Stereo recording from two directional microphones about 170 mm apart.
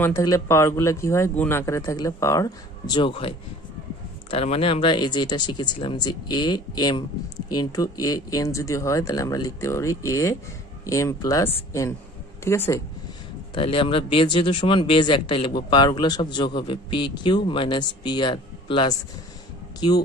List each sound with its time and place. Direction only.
0.0 s speech: 20° left (ahead or behind)
13.6 s speech: 30° left (ahead or behind)